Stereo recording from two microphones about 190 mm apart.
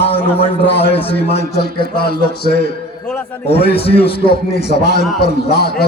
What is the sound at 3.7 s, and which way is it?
Speech, 30° left (ahead or behind).